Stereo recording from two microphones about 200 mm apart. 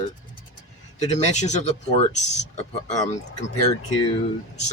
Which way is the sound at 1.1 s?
35° left (ahead or behind).